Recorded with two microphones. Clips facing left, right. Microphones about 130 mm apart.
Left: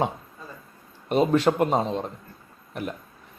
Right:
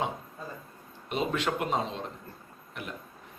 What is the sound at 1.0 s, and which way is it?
Speech, 40° left (ahead or behind).